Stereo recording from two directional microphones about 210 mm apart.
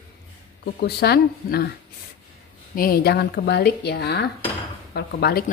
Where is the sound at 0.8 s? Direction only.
50° left (ahead or behind).